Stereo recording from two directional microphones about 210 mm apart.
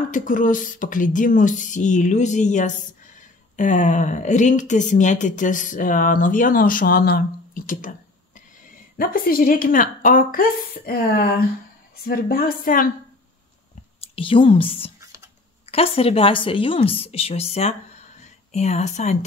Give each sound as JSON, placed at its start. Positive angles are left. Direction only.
{"t": 0.1, "sound": "a woman's voice", "side_deg": 40}
{"t": 8.9, "sound": "a woman's voice", "side_deg": 45}
{"t": 14.0, "sound": "a woman's voice", "side_deg": 25}